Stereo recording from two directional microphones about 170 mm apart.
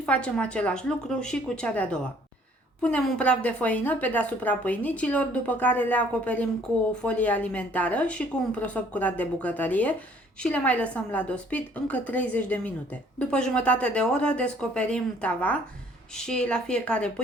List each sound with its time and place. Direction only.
0.0 s a woman's voice: 5° left (ahead or behind)